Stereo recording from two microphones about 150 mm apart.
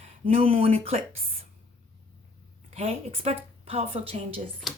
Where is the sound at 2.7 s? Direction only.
40° right (ahead or behind).